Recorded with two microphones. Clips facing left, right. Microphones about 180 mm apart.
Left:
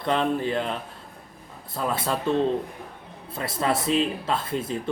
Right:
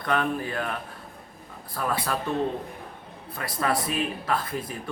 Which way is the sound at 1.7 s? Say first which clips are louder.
Left 2 dB; 25° left (ahead or behind).